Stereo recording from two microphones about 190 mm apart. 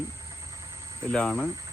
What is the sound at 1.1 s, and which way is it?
Speech, 5° left (ahead or behind).